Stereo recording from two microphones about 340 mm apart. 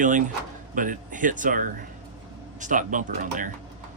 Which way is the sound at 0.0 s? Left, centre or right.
Right.